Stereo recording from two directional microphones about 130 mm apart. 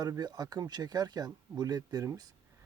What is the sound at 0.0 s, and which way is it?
A man's voice, 30° right (ahead or behind).